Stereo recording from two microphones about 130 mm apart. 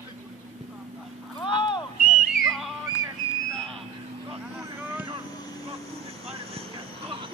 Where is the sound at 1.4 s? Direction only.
40° left (ahead or behind).